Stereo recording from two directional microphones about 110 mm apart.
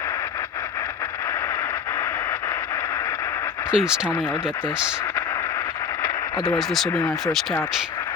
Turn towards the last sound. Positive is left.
turn(degrees=0)  # may be behind; listen again after turning